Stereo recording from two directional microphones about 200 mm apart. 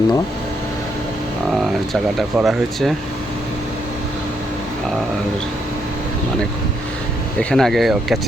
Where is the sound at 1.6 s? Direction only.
Centre (ahead or behind).